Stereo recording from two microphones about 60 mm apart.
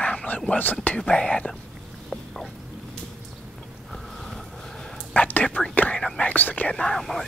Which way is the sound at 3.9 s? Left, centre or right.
Centre.